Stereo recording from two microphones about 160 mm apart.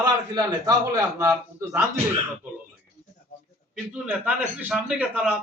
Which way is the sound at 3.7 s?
10° right (ahead or behind).